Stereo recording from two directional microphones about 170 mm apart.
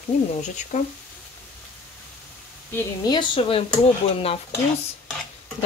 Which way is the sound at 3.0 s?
30° left (ahead or behind).